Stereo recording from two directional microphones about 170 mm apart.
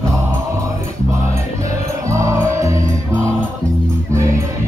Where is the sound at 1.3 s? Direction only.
20° right (ahead or behind).